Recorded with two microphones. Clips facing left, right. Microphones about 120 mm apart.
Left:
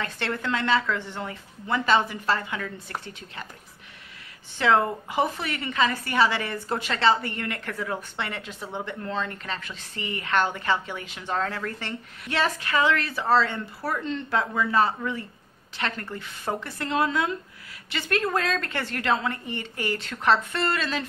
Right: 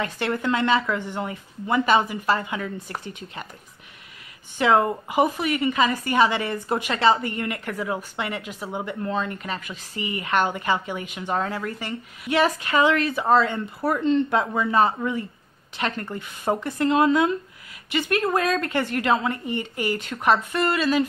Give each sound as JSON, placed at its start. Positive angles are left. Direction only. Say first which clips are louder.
{"t": 0.0, "sound": "a woman's voice", "louder": "right 4 dB", "side_deg": -15}
{"t": 4.6, "sound": "a woman's voice", "louder": "right 2 dB", "side_deg": -15}